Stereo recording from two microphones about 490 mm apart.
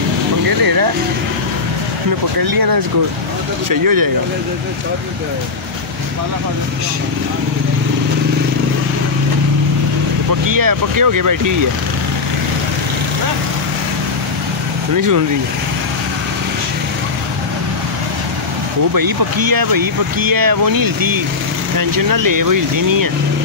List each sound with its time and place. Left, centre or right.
0.5 s vehicle: right
2.5 s speech: right
10.4 s speech: right
15.0 s speech: right
18.9 s speech: right